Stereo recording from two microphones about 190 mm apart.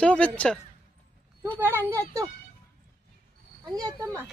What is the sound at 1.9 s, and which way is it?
Speech, 15° right (ahead or behind).